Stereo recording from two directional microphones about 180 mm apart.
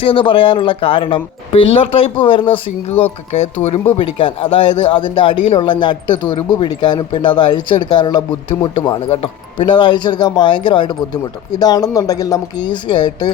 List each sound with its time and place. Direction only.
0.0 s speech: 30° left (ahead or behind)